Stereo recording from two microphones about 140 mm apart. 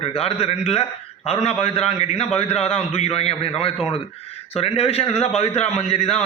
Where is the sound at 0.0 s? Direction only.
45° left (ahead or behind).